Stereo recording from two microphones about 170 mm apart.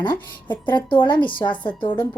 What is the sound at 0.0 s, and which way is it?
A woman's voice, 25° left (ahead or behind).